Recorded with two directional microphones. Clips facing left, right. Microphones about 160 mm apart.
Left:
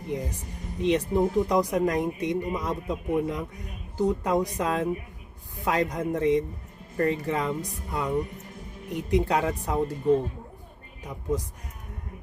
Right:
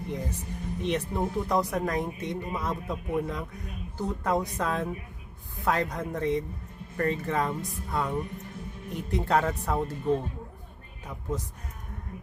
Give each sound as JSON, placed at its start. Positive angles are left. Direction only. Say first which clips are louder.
{"t": 0.1, "sound": "speech", "louder": "left 4 dB", "side_deg": 15}